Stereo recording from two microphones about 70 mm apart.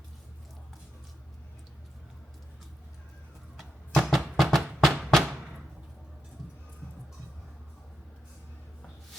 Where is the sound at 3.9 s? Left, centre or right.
Centre.